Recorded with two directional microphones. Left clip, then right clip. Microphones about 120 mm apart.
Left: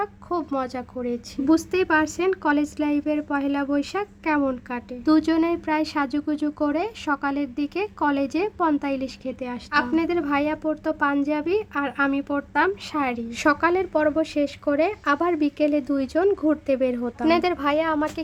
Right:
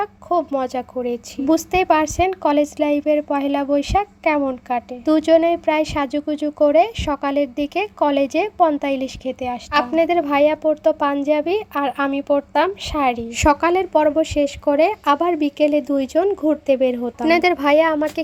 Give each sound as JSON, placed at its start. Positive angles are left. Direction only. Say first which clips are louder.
{"t": 0.0, "sound": "a woman's voice", "louder": "right 7 dB", "side_deg": -15}